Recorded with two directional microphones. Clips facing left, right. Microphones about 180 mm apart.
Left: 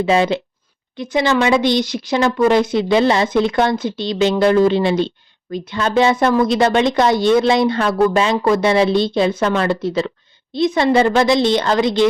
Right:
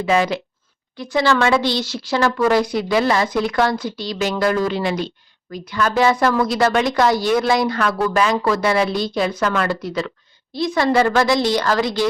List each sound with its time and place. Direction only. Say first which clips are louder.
0.0 s a woman's voice: left 3 dB; 25° left (ahead or behind)